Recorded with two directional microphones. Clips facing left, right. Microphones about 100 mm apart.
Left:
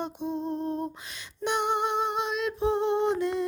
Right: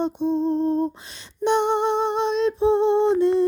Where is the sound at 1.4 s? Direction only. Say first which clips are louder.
Right 7 dB; 30° right (ahead or behind).